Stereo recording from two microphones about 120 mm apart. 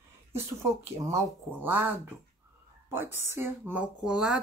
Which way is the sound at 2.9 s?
20° right (ahead or behind).